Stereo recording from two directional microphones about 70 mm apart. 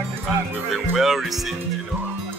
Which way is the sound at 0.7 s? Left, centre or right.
Centre.